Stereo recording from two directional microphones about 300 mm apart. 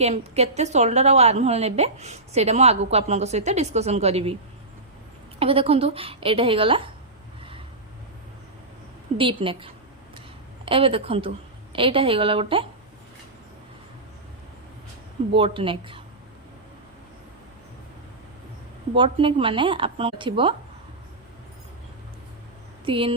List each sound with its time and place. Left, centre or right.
0.0 s a woman's voice: right
5.4 s a woman's voice: centre
9.1 s a woman's voice: centre
10.7 s a woman's voice: centre
15.4 s a woman's voice: centre
18.9 s a woman's voice: centre
22.9 s a woman's voice: centre